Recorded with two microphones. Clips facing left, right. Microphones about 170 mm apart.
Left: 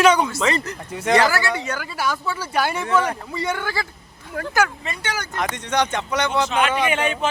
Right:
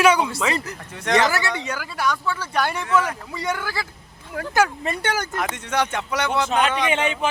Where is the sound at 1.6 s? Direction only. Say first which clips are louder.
Left 1 dB; 10° right (ahead or behind).